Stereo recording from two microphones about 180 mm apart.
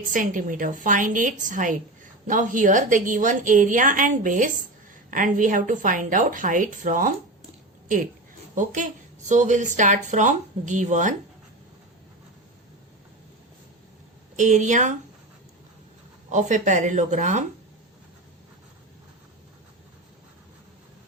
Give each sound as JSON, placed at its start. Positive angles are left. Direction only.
{"t": 0.1, "sound": "a woman's voice", "side_deg": -45}
{"t": 8.5, "sound": "a woman's voice", "side_deg": -45}
{"t": 14.3, "sound": "a woman's voice", "side_deg": -45}
{"t": 16.3, "sound": "a woman's voice", "side_deg": -45}